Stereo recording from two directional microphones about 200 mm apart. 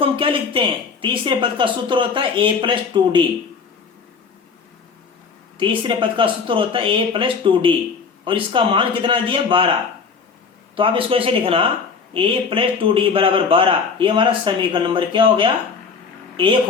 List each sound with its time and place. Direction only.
0.0 s a man's voice: 25° right (ahead or behind)
5.5 s a man's voice: 25° right (ahead or behind)
10.8 s a man's voice: 25° right (ahead or behind)